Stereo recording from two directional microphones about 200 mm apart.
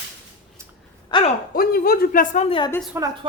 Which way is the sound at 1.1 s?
25° left (ahead or behind).